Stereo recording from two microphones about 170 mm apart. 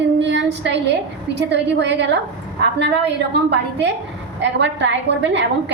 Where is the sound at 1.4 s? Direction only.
90° right.